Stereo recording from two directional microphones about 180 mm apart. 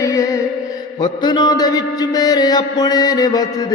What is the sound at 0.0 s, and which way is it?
Music, 15° left (ahead or behind).